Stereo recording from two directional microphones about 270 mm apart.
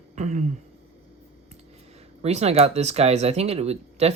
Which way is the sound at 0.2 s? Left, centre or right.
Right.